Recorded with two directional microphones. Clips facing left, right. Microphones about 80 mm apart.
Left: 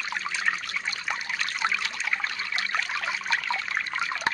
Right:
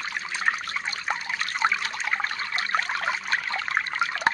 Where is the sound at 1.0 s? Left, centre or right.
Right.